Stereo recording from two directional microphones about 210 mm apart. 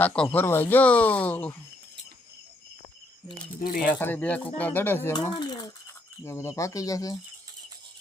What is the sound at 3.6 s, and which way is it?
Speech, 40° left (ahead or behind).